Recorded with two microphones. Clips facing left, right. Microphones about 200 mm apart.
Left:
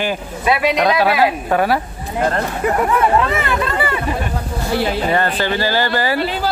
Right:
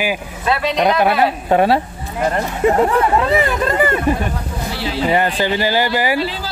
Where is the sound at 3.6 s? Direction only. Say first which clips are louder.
Right 4 dB; 45° right (ahead or behind).